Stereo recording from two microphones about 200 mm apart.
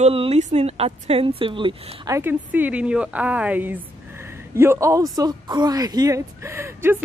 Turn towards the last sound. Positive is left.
turn(degrees=-10)  # may be behind; listen again after turning